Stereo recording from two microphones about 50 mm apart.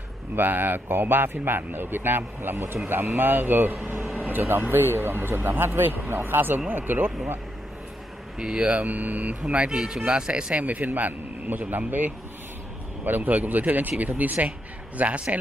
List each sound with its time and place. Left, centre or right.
0.4 s speech: right
8.4 s speech: right
8.8 s speech: right
9.5 s speech: right
10.6 s speech: right